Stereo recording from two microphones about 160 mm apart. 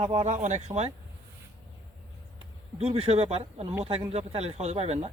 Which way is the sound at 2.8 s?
40° right (ahead or behind).